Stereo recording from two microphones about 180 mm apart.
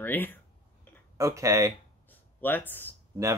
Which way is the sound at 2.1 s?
10° left (ahead or behind).